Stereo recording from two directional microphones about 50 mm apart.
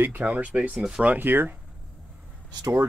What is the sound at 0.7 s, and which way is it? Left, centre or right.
Speech, centre.